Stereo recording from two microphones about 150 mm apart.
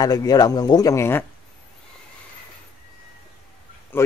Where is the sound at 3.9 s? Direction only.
15° left (ahead or behind).